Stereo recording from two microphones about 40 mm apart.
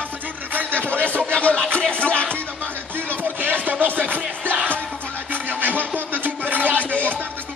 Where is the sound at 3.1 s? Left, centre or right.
Right.